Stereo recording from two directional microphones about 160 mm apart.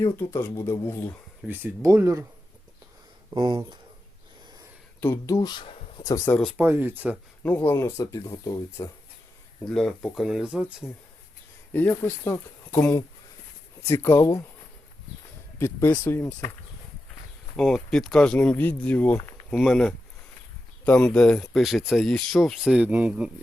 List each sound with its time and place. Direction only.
0.0 s speech: 15° left (ahead or behind)
1.5 s speech: 15° right (ahead or behind)
3.2 s speech: 25° right (ahead or behind)
4.9 s speech: 15° left (ahead or behind)
6.3 s speech: centre (ahead or behind)
6.6 s speech: 15° right (ahead or behind)
7.4 s speech: 10° left (ahead or behind)
9.7 s speech: centre (ahead or behind)
11.7 s speech: 10° left (ahead or behind)
15.5 s speech: 15° left (ahead or behind)
17.6 s speech: centre (ahead or behind)